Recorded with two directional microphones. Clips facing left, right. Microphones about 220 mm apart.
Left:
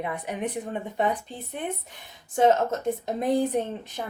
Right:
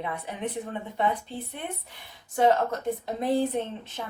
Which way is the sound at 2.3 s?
20° left (ahead or behind).